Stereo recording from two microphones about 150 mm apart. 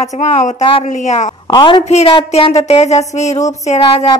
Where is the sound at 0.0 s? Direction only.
50° left (ahead or behind).